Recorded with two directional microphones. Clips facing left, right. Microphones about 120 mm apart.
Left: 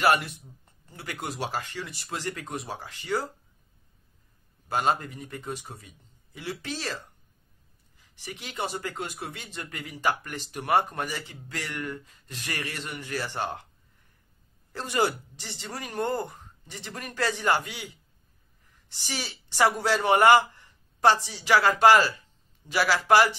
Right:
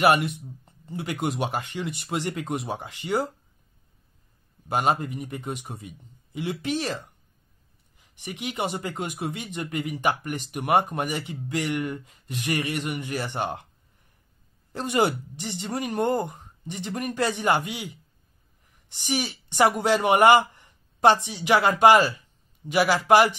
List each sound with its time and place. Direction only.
0.0 s speech: 20° right (ahead or behind)
4.6 s speech: 15° right (ahead or behind)
14.7 s a woman's voice: 20° right (ahead or behind)